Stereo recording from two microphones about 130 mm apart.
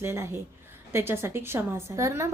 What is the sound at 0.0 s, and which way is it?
Speech, 20° right (ahead or behind).